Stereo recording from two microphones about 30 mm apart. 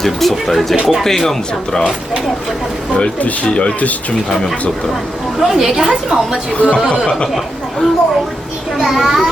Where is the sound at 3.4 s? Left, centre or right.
Left.